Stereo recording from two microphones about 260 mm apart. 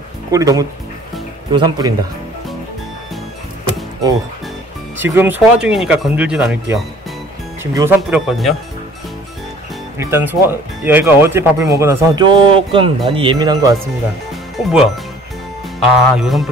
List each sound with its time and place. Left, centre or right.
0.3 s speech: centre
5.1 s speech: centre
9.9 s speech: centre
14.3 s music: centre
15.9 s speech: centre